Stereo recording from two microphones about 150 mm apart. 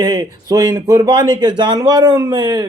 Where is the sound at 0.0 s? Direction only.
25° right (ahead or behind).